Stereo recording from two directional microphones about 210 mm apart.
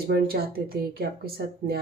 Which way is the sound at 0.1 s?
45° right (ahead or behind).